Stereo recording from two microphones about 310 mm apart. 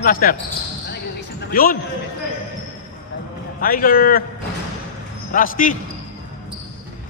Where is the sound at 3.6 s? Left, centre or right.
Left.